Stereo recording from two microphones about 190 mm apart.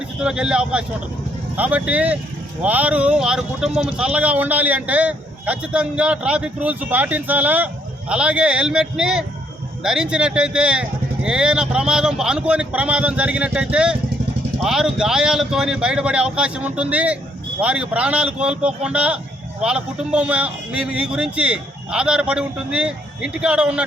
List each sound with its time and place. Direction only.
0.2 s a man's voice: 5° right (ahead or behind)